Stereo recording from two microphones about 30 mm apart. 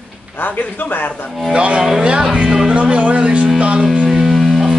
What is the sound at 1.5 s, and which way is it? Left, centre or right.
Speech, right.